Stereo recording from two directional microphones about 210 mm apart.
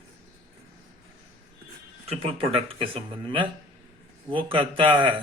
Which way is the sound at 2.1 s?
25° right (ahead or behind).